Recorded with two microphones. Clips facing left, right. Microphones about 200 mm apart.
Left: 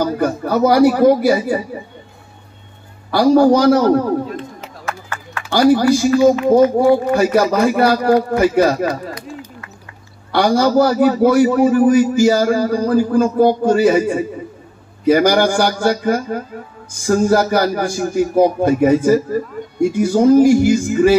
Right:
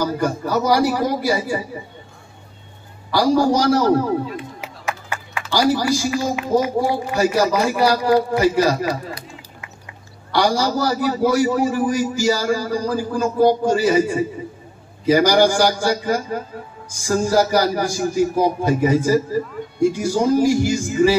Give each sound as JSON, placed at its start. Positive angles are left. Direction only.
{"t": 0.0, "sound": "speech", "side_deg": 55}
{"t": 3.1, "sound": "a man's voice", "side_deg": 55}
{"t": 4.4, "sound": "a sound", "side_deg": -10}
{"t": 5.5, "sound": "a man's voice", "side_deg": 55}
{"t": 10.3, "sound": "a man's voice", "side_deg": 55}